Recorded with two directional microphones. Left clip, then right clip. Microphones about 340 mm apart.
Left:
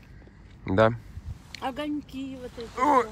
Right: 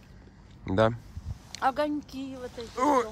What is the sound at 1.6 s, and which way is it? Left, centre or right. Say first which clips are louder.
Speech: right 5 dB; right.